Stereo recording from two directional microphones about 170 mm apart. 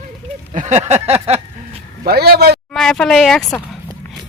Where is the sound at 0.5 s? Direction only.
45° right (ahead or behind).